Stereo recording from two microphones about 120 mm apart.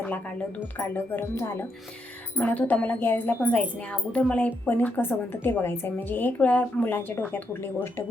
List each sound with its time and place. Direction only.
0.0 s a woman's voice: 15° left (ahead or behind)